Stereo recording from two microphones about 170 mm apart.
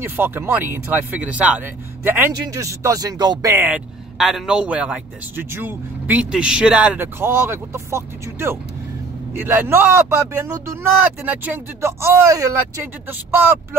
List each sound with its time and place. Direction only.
0.0 s speech: 15° right (ahead or behind)
3.5 s speech: 10° right (ahead or behind)